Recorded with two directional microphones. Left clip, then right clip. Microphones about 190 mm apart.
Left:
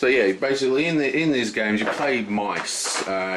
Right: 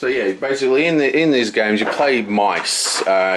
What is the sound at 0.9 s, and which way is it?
Speech, 30° right (ahead or behind).